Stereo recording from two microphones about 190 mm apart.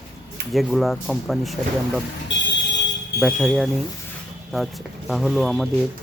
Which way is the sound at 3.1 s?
Centre (ahead or behind).